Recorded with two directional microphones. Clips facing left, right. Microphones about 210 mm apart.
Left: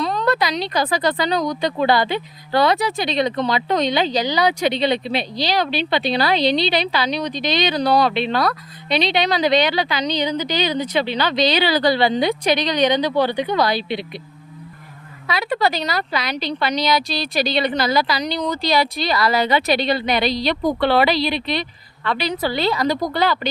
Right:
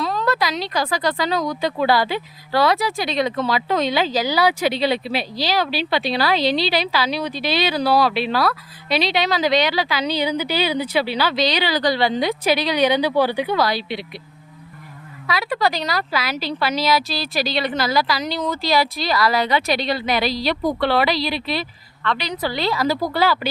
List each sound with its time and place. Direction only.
0.0 s speech: centre (ahead or behind)
11.5 s speech: 25° left (ahead or behind)
11.9 s speech: centre (ahead or behind)
15.3 s speech: centre (ahead or behind)